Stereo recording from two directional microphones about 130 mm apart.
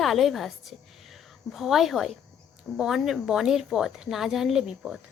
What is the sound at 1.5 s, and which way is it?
A woman's voice, 5° right (ahead or behind).